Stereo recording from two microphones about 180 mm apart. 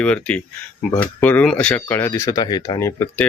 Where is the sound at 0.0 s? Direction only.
5° left (ahead or behind).